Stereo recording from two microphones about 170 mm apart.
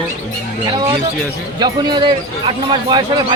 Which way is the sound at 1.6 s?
25° right (ahead or behind).